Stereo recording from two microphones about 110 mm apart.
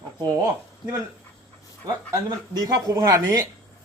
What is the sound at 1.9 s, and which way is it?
A man's voice, 35° right (ahead or behind).